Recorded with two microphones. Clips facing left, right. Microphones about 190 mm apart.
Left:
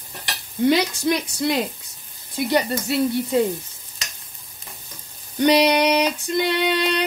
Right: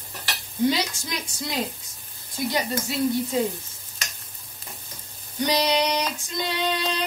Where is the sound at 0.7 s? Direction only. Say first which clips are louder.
Left 9 dB; 65° left (ahead or behind).